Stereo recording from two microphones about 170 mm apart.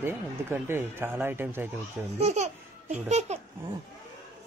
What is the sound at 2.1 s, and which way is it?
Laughter, 40° right (ahead or behind).